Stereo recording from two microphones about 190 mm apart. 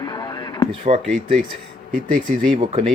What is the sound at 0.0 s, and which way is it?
Radio, 20° left (ahead or behind).